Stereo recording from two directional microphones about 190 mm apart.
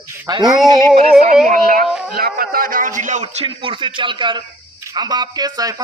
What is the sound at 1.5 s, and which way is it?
Music, 45° right (ahead or behind).